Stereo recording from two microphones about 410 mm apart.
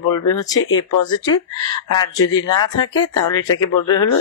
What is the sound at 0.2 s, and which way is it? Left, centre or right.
Speech, left.